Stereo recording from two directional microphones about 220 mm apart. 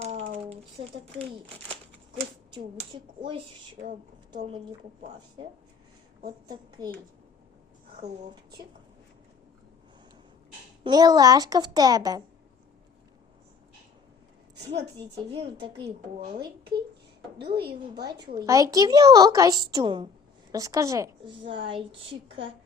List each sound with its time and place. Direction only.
0.0 s a sound: 30° right (ahead or behind)
1.1 s a woman's voice: 25° right (ahead or behind)
6.5 s a woman's voice: 15° right (ahead or behind)
10.8 s a woman's voice: 15° right (ahead or behind)
14.7 s a woman's voice: 25° right (ahead or behind)
16.4 s a woman's voice: 45° right (ahead or behind)
18.0 s a woman's voice: 20° right (ahead or behind)